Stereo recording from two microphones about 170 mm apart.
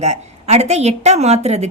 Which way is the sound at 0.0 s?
40° right (ahead or behind).